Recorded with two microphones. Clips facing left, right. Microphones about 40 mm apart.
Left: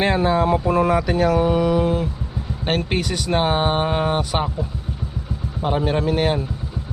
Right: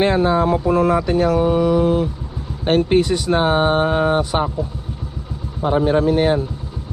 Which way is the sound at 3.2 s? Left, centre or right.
Centre.